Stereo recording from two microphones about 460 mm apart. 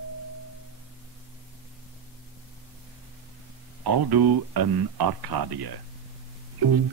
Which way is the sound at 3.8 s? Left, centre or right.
Right.